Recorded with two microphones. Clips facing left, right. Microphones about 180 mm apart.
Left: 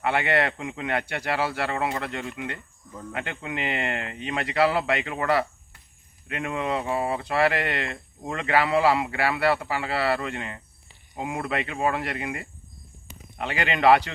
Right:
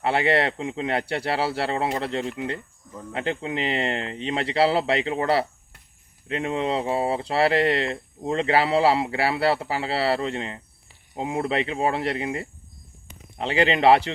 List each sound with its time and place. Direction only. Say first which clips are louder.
0.0 s speech: right 2 dB; 30° right (ahead or behind)